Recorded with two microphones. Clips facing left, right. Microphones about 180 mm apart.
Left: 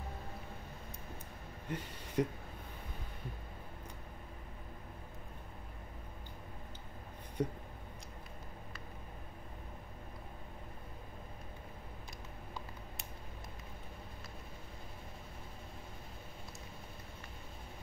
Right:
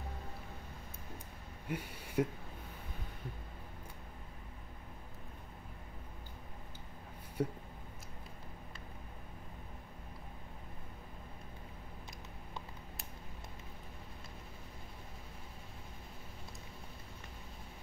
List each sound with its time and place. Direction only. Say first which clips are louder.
1.7 s speech: right 1 dB; 10° right (ahead or behind)
7.4 s speech: even; 5° right (ahead or behind)